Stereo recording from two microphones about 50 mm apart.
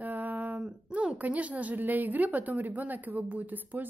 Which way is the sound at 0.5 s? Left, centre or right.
Right.